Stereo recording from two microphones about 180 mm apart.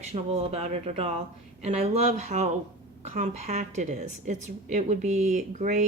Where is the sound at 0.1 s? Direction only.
35° right (ahead or behind).